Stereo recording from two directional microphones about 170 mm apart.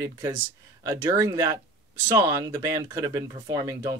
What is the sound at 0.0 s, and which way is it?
Speech, 20° right (ahead or behind).